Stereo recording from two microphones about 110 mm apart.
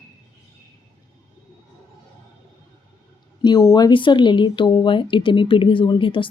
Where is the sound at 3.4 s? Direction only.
40° left (ahead or behind).